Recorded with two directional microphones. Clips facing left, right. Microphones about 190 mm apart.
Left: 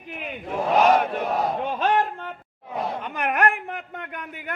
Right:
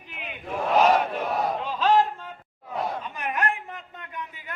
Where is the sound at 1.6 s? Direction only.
55° left (ahead or behind).